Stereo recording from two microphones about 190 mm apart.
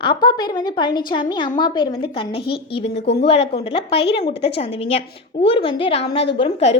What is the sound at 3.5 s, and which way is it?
A woman's voice, 30° left (ahead or behind).